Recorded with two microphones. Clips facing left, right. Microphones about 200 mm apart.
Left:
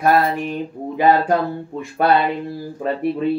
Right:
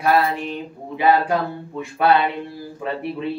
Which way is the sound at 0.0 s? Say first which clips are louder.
Left 2 dB; 50° left (ahead or behind).